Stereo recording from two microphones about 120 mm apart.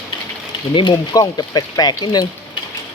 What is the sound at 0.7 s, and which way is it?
Speech, 40° left (ahead or behind).